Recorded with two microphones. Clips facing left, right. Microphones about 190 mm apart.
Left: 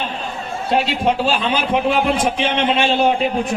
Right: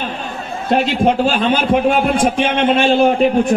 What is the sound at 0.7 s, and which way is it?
A man's voice, 50° right (ahead or behind).